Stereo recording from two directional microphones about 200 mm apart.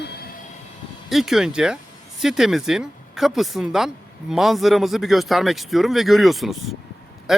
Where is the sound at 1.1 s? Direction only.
Centre (ahead or behind).